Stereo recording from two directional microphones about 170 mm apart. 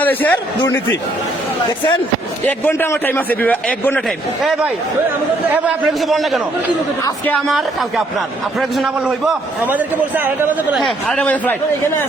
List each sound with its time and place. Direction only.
0.0 s a man's voice: 10° left (ahead or behind)
2.5 s a man's voice: 10° left (ahead or behind)
5.5 s a man's voice: 5° right (ahead or behind)